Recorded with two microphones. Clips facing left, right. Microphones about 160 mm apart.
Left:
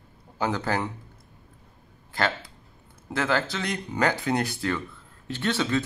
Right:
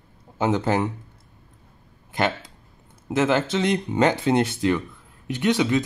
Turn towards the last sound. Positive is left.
turn(degrees=-15)  # may be behind; listen again after turning